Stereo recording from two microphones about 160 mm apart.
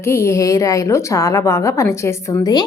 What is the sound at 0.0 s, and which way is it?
A woman's voice, 15° left (ahead or behind).